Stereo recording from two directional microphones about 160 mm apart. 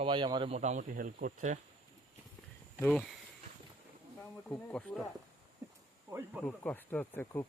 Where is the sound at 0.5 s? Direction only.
45° right (ahead or behind).